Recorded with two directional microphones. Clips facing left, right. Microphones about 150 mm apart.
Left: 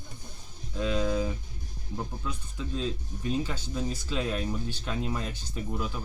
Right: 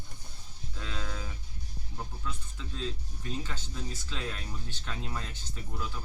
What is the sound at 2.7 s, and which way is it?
Speech, 15° left (ahead or behind).